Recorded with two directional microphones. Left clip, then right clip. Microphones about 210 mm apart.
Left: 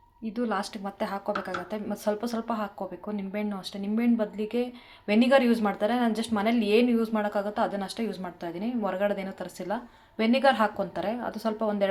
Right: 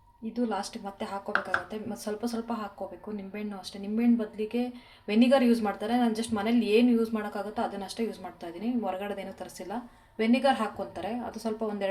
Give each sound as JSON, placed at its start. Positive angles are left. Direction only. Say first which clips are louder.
{"t": 0.3, "sound": "speech", "louder": "left 2 dB", "side_deg": 20}